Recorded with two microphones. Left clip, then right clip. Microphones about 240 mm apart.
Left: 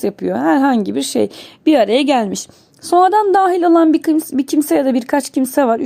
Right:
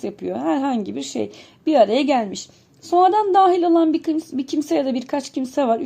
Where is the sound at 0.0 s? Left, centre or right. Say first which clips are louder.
Left 8 dB; left.